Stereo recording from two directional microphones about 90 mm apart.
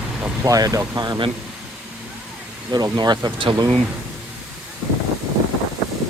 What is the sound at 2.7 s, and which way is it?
Speech, 45° right (ahead or behind).